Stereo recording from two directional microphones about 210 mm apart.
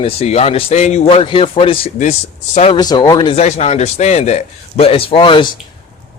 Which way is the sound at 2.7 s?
20° left (ahead or behind).